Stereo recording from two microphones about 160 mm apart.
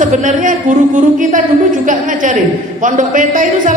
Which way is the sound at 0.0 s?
50° right (ahead or behind).